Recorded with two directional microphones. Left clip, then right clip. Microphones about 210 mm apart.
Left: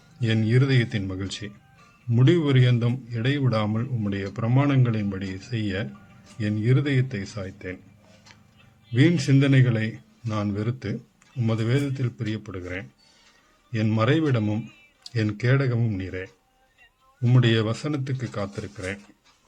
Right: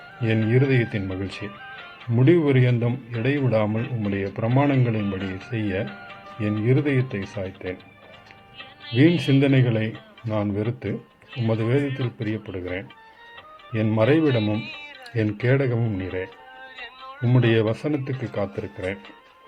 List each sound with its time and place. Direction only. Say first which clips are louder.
0.2 s a man's voice: right 3 dB; 10° left (ahead or behind)
8.5 s music: right 12 dB; 40° right (ahead or behind)
9.0 s a man's voice: right 3 dB; 10° left (ahead or behind)
14.6 s music: right 10 dB; 40° right (ahead or behind)
15.1 s a man's voice: right 3 dB; 10° left (ahead or behind)
16.7 s music: right 17 dB; 40° right (ahead or behind)
17.2 s a man's voice: right 3 dB; 10° left (ahead or behind)